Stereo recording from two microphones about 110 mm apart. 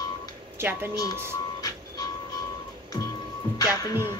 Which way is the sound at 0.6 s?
20° right (ahead or behind).